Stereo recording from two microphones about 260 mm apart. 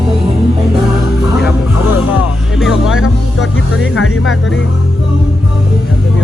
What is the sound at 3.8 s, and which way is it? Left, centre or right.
Music, left.